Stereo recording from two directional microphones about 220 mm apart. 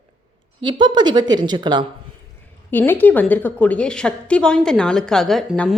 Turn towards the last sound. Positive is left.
turn(degrees=5)  # may be behind; listen again after turning